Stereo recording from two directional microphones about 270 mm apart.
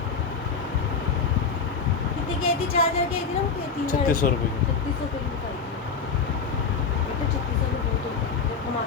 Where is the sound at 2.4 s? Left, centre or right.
Left.